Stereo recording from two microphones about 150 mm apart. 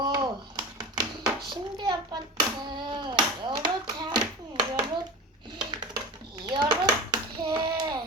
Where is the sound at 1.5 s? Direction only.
30° right (ahead or behind).